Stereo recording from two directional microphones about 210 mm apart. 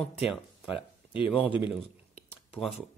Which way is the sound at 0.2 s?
25° left (ahead or behind).